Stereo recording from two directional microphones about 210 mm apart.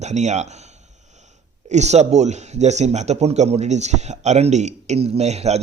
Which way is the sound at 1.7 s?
30° right (ahead or behind).